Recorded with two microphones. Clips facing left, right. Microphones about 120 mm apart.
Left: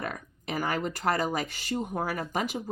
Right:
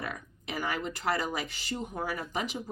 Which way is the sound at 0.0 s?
45° left (ahead or behind).